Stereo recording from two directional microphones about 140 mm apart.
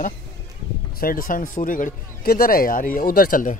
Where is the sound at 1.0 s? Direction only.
85° left.